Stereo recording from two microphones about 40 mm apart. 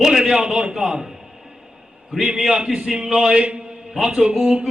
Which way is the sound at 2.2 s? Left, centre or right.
Centre.